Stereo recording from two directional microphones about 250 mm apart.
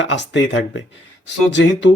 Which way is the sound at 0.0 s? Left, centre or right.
Left.